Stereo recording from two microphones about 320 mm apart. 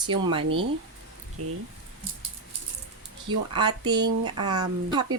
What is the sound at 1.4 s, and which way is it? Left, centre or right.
Speech, right.